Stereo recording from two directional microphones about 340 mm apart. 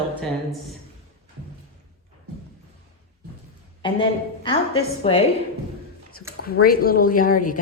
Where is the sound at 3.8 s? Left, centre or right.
Centre.